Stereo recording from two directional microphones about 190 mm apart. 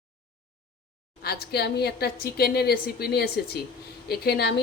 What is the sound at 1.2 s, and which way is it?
A woman's voice, 55° left (ahead or behind).